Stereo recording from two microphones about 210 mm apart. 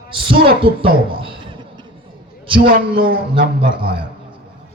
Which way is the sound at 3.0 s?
45° right (ahead or behind).